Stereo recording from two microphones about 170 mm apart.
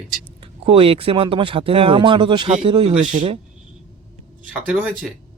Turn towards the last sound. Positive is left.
turn(degrees=-5)  # may be behind; listen again after turning